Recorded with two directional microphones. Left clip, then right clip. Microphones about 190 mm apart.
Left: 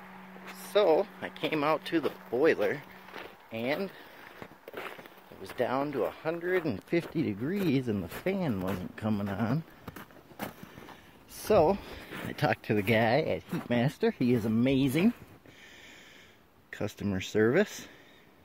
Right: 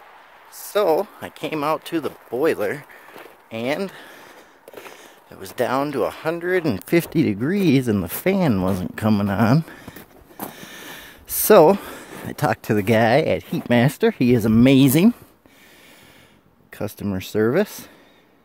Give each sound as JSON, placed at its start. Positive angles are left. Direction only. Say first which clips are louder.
{"t": 0.7, "sound": "speech", "louder": "right 6 dB", "side_deg": -35}
{"t": 1.3, "sound": "speech", "louder": "right 6 dB", "side_deg": -20}
{"t": 3.5, "sound": "speech", "louder": "right 8 dB", "side_deg": -55}
{"t": 5.4, "sound": "speech", "louder": "right 9 dB", "side_deg": -60}
{"t": 11.4, "sound": "speech", "louder": "right 12 dB", "side_deg": -60}
{"t": 12.3, "sound": "speech", "louder": "right 8 dB", "side_deg": -20}
{"t": 16.7, "sound": "speech", "louder": "right 7 dB", "side_deg": -15}